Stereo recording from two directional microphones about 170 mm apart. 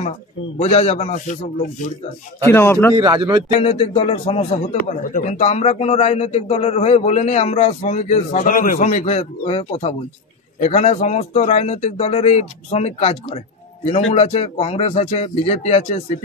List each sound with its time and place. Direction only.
0.6 s speech: 35° left (ahead or behind)
2.4 s a man's voice: 15° left (ahead or behind)
3.0 s speech: 25° right (ahead or behind)
3.5 s speech: 35° left (ahead or behind)
4.8 s speech: 50° left (ahead or behind)
8.7 s speech: 40° left (ahead or behind)